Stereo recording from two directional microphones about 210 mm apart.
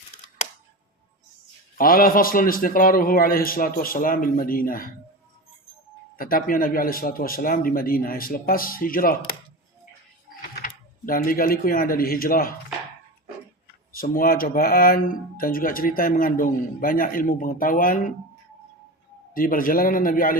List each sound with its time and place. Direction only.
1.8 s speech: 40° left (ahead or behind)
6.1 s speech: 40° left (ahead or behind)
10.5 s speech: 40° left (ahead or behind)
13.9 s speech: 45° left (ahead or behind)
19.3 s a man's voice: 40° left (ahead or behind)